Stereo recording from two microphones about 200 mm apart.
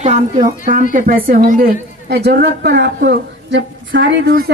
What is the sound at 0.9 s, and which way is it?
A woman's voice, 45° right (ahead or behind).